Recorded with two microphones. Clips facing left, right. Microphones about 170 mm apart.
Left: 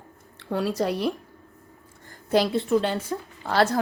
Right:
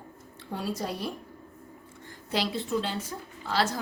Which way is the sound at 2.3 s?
55° left (ahead or behind).